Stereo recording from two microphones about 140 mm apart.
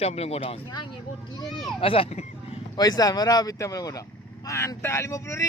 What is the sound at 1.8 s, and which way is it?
Speech, 40° left (ahead or behind).